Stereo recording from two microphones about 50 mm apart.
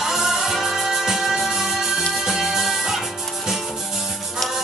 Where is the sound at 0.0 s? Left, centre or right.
Centre.